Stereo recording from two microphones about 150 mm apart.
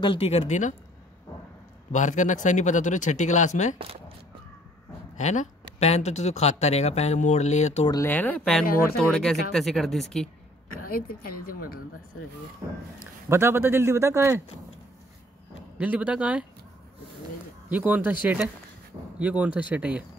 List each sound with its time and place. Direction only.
0.0 s speech: 35° left (ahead or behind); by 0.7 s 55° left (ahead or behind)
1.9 s speech: 55° left (ahead or behind)
5.1 s speech: 55° left (ahead or behind)
7.9 s speech: 15° left (ahead or behind)
10.8 s a woman's voice: 75° left (ahead or behind)
13.3 s a man's voice: 15° right (ahead or behind)
15.8 s a man's voice: 10° right (ahead or behind)
17.6 s a man's voice: 10° right (ahead or behind)